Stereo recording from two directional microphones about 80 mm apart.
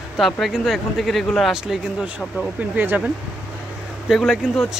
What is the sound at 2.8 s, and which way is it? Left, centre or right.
Speech, right.